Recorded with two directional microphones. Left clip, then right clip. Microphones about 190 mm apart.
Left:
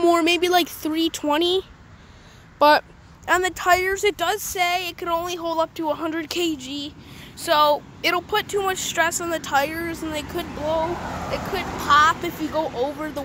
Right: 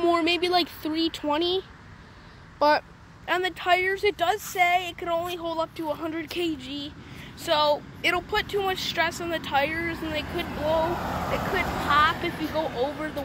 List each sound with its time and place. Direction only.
0.0 s speech: 30° left (ahead or behind)
3.3 s speech: 30° left (ahead or behind)
11.0 s speech: 15° right (ahead or behind)
11.9 s speech: 30° left (ahead or behind)